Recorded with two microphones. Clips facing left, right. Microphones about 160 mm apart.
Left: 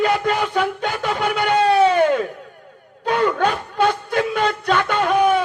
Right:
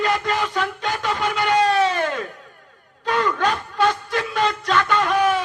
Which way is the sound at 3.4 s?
55° left (ahead or behind).